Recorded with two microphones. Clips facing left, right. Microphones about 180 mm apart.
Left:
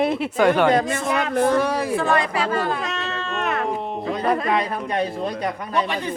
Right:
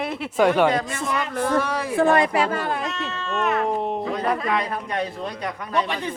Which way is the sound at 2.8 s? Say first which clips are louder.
Left 1 dB; 80° left.